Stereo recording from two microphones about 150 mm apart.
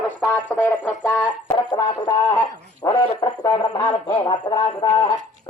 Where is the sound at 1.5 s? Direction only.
25° left (ahead or behind).